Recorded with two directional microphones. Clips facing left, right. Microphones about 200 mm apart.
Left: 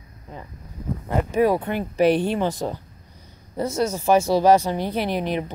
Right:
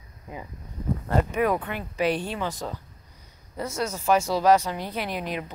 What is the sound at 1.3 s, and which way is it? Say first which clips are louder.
Speech: left 5 dB; 30° left (ahead or behind).